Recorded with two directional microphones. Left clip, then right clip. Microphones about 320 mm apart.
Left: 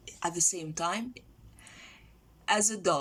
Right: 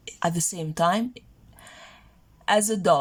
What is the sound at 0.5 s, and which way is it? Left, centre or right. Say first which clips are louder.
Speech: right 9 dB; right.